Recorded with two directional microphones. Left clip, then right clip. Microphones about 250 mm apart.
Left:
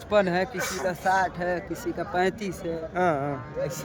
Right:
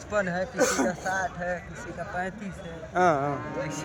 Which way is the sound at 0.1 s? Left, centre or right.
Left.